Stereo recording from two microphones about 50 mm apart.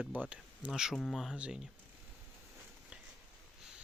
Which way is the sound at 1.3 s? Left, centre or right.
Right.